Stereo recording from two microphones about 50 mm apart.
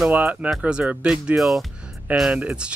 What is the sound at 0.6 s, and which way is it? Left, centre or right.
Speech, centre.